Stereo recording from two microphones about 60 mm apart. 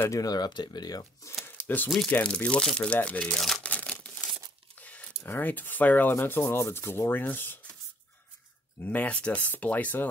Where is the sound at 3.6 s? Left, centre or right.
Left.